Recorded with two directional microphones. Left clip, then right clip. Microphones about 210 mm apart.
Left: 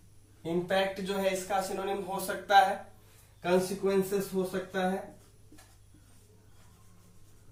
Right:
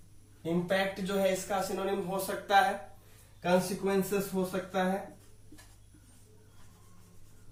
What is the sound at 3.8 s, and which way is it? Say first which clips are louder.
Speech: left 2 dB; 10° left (ahead or behind).